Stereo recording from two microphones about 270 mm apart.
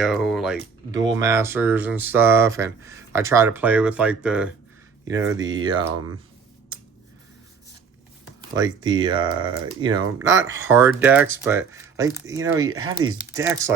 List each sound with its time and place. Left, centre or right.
0.0 s a sound: centre
0.9 s speech: centre
8.4 s speech: centre